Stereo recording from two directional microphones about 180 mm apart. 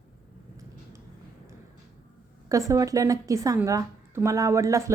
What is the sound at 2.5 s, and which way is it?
A woman's voice, 20° right (ahead or behind).